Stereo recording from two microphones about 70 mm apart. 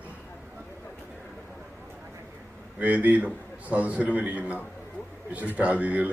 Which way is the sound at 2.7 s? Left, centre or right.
Right.